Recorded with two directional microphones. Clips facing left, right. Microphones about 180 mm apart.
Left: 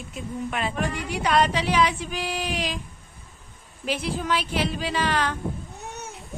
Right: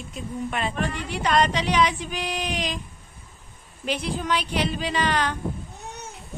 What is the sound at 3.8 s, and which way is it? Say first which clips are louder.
Speech: even; 5° left (ahead or behind).